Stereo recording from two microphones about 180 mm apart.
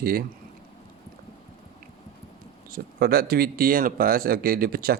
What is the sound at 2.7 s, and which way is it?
Speech, 55° right (ahead or behind).